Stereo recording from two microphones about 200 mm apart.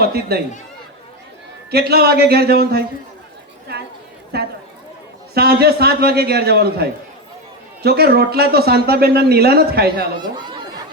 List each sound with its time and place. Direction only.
0.0 s a man's voice: 50° right (ahead or behind)
1.7 s a man's voice: 50° right (ahead or behind)
5.3 s a man's voice: 50° right (ahead or behind)
10.2 s speech: 20° right (ahead or behind)